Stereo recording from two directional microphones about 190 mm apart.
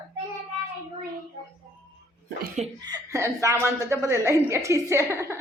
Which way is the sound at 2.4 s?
40° right (ahead or behind).